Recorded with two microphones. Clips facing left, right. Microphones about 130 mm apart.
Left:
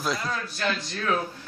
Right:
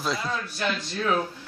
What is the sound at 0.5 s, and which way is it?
Speech, 15° right (ahead or behind).